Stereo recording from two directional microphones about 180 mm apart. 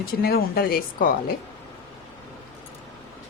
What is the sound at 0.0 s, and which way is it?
Speech, 55° left (ahead or behind).